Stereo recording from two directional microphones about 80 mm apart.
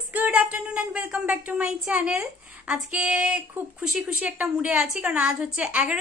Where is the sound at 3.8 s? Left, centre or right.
Centre.